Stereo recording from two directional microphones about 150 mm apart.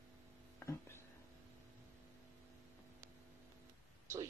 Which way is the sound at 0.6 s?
15° left (ahead or behind).